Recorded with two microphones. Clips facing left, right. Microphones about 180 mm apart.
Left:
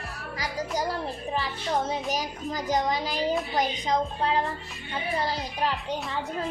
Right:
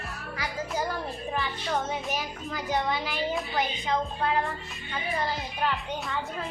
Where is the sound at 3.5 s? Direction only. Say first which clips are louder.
Left 2 dB; 40° left (ahead or behind).